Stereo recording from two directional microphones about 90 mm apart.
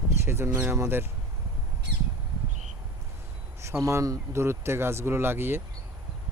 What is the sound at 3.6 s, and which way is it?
Speech, 30° right (ahead or behind).